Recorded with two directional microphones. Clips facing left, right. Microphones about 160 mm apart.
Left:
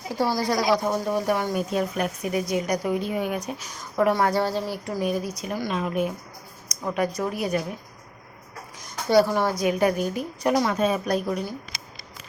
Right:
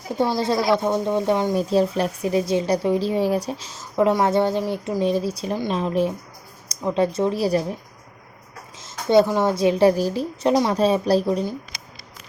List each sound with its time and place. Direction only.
0.1 s speech: 20° right (ahead or behind)
8.8 s speech: 20° right (ahead or behind)